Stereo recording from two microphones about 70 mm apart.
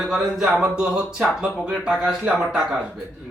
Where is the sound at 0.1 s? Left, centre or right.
Centre.